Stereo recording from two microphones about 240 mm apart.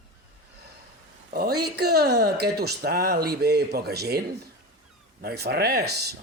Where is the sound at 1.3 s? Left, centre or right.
Right.